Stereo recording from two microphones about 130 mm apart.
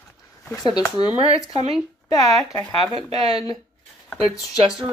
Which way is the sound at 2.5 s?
25° left (ahead or behind).